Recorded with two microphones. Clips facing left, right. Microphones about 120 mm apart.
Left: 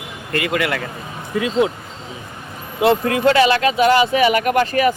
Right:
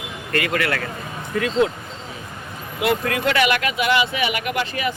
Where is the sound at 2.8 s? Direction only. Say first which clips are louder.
Left 6 dB; 25° left (ahead or behind).